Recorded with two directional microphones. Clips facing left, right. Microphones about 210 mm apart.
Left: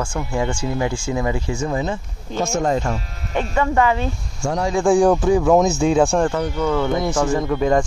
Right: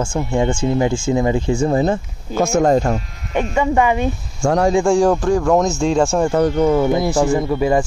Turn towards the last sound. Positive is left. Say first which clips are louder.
# right 1 dB
turn(degrees=-10)  # may be behind; listen again after turning